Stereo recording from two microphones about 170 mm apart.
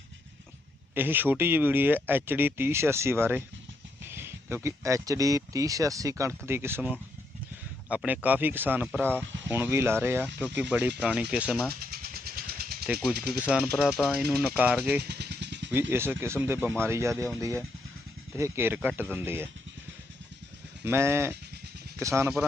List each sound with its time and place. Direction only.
0.9 s speech: 10° right (ahead or behind)
11.8 s vehicle: 60° right (ahead or behind)
12.8 s speech: 5° right (ahead or behind)
15.0 s vehicle: 80° right
15.9 s speech: 15° right (ahead or behind)
20.8 s speech: 15° right (ahead or behind)